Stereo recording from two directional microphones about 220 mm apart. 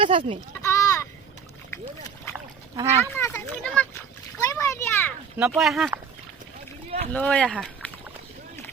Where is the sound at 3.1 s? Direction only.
10° left (ahead or behind).